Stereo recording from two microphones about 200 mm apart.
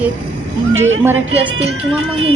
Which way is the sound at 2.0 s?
80° right.